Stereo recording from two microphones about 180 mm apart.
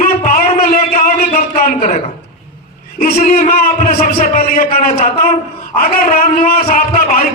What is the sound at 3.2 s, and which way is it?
A man's voice, 40° left (ahead or behind).